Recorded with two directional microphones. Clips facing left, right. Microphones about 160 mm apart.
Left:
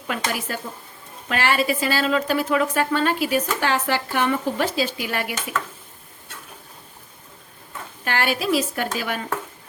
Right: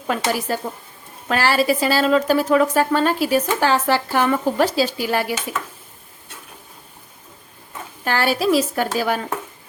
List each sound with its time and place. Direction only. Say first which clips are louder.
0.1 s a woman's voice: right 5 dB; 35° right (ahead or behind)
8.0 s a woman's voice: right 4 dB; 35° right (ahead or behind)